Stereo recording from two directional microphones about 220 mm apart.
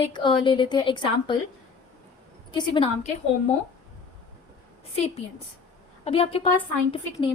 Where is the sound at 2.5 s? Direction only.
20° left (ahead or behind).